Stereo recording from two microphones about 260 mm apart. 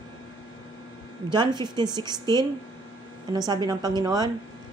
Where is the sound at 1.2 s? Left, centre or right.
Centre.